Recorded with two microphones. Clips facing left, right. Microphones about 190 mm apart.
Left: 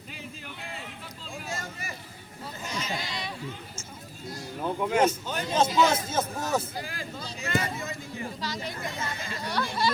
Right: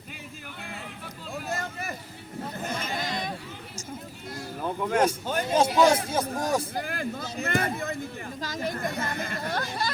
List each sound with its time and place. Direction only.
1.3 s a sound: 60° right (ahead or behind)
2.6 s sheep: 55° right (ahead or behind)
4.8 s speech: 5° left (ahead or behind)
5.2 s speech: 50° right (ahead or behind)
5.5 s speech: 10° right (ahead or behind)
6.7 s speech: 55° right (ahead or behind)